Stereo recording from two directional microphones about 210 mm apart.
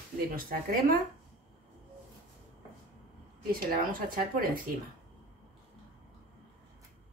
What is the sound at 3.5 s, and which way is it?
Speech, 45° right (ahead or behind).